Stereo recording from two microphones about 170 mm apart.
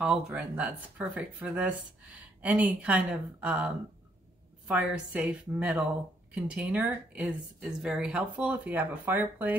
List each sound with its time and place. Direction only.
0.0 s speech: 5° right (ahead or behind)